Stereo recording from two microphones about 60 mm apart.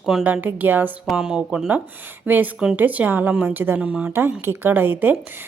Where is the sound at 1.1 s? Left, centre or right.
Centre.